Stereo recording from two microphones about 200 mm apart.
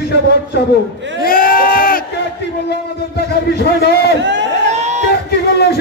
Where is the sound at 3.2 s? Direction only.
55° left (ahead or behind).